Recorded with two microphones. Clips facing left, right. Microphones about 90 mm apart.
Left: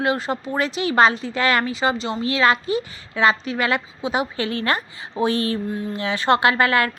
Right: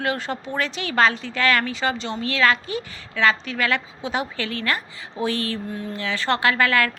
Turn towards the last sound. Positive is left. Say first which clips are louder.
# left 2 dB
turn(degrees=20)  # may be behind; listen again after turning